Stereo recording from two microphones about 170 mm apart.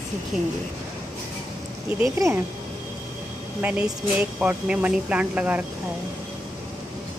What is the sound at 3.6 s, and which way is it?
A woman's voice, 5° right (ahead or behind).